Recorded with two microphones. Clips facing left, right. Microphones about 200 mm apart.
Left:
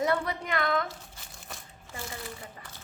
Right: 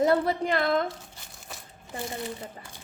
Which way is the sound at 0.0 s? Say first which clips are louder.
Right 6 dB; 30° right (ahead or behind).